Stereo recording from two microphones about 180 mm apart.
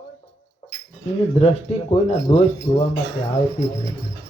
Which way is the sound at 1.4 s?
35° left (ahead or behind).